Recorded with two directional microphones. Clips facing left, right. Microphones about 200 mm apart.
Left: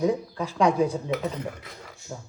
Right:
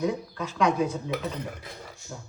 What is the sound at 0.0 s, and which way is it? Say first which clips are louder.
Speech: left 4 dB; 30° left (ahead or behind).